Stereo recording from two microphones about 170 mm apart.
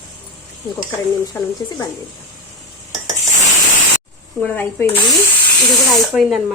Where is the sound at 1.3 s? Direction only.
25° left (ahead or behind).